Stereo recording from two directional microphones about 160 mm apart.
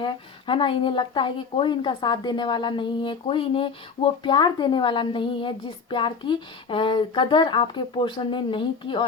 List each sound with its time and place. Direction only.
0.0 s speech: 30° left (ahead or behind)